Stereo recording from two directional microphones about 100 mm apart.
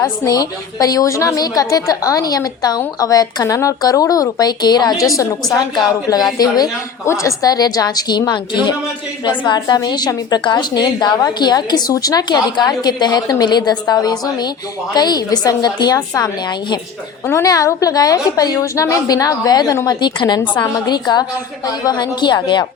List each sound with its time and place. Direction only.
0.3 s a woman's voice: 40° left (ahead or behind)
17.4 s a woman's voice: 35° left (ahead or behind)